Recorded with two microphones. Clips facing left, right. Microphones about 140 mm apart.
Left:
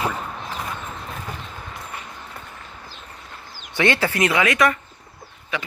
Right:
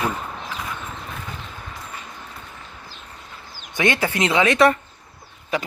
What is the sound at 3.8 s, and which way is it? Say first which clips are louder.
Speech: left 1 dB; 15° right (ahead or behind).